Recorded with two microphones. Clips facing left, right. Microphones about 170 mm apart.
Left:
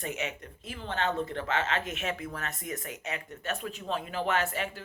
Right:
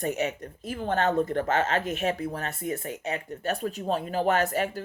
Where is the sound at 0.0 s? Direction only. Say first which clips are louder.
Right 7 dB; 40° right (ahead or behind).